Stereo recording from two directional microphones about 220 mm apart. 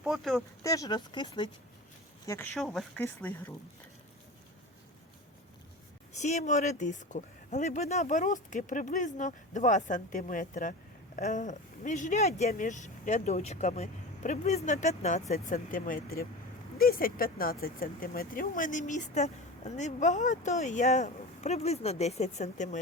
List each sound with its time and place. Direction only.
0.0 s speech: centre (ahead or behind)
0.6 s speech: 15° left (ahead or behind)
6.1 s speech: 30° left (ahead or behind)